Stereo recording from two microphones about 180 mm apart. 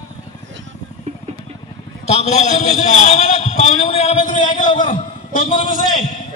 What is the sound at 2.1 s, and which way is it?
A man's voice, 40° left (ahead or behind).